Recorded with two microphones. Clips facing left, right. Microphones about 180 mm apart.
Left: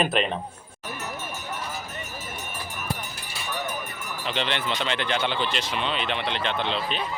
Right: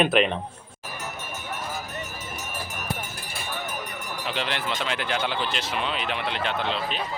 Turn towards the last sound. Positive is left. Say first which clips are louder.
# even
turn(degrees=-5)  # may be behind; listen again after turning